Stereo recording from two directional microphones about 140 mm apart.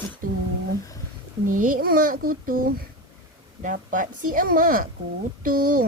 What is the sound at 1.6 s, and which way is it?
A child's voice, 85° right.